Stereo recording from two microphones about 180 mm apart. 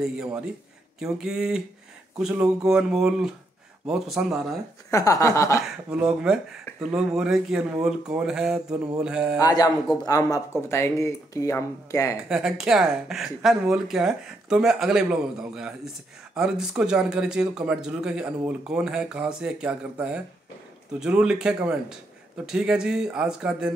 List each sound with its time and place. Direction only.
0.0 s speech: 5° right (ahead or behind)
4.9 s speech: 20° left (ahead or behind)
5.9 s speech: 5° right (ahead or behind)
9.4 s speech: 20° left (ahead or behind)
12.3 s speech: 5° right (ahead or behind)